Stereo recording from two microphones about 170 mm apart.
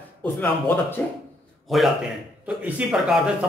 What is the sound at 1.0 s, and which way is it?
Speech, 10° left (ahead or behind).